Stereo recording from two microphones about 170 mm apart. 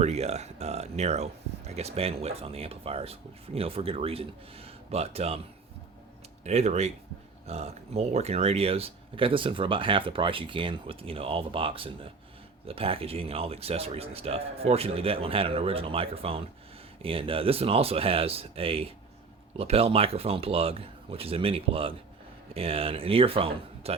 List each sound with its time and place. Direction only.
0.0 s speech: 40° right (ahead or behind)
6.4 s speech: 40° right (ahead or behind)